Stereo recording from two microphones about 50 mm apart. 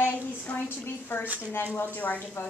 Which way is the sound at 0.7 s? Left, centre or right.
Left.